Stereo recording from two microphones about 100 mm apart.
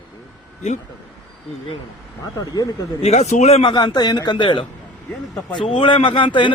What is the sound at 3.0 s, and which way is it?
Speech, 90° left.